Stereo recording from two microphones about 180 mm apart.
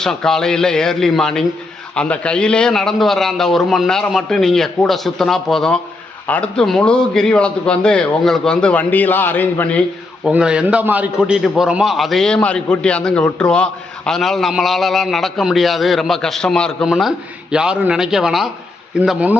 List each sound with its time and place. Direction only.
0.0 s a man's voice: 5° left (ahead or behind)
10.2 s a man's voice: 5° right (ahead or behind)